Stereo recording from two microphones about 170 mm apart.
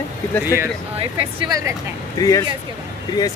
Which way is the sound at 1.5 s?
20° right (ahead or behind).